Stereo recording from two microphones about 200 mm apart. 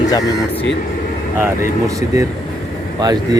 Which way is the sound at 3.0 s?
20° right (ahead or behind).